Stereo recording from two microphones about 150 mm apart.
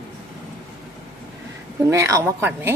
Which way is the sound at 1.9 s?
20° right (ahead or behind).